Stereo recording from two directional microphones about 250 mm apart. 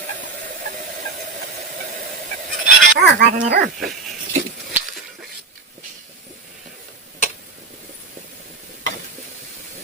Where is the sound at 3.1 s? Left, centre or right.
Right.